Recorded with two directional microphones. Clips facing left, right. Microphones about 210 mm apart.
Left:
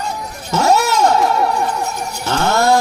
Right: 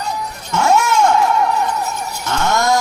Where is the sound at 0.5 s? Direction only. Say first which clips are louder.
Even; 35° left (ahead or behind).